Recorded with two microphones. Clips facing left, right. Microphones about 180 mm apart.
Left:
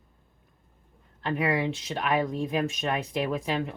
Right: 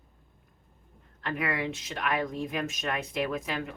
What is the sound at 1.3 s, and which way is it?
Speech, 30° left (ahead or behind).